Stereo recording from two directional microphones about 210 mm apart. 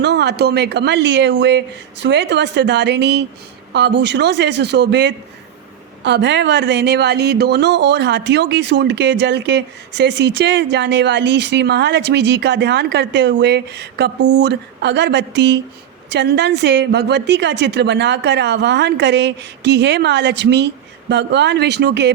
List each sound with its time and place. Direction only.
0.0 s speech: 55° right (ahead or behind)